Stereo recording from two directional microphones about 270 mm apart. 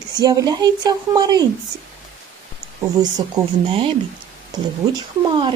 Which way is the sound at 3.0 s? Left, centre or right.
Centre.